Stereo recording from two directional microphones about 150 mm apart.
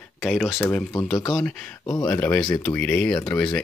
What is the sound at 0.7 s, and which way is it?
Speech, 10° left (ahead or behind).